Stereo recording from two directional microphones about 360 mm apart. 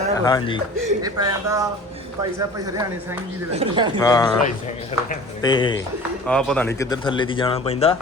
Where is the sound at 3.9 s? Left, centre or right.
Centre.